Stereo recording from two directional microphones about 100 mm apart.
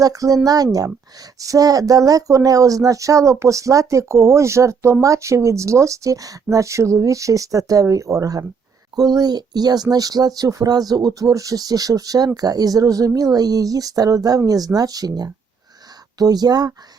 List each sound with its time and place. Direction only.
0.0 s speech: 35° right (ahead or behind)